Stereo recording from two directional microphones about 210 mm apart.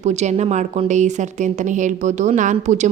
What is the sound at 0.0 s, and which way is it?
Speech, 35° right (ahead or behind).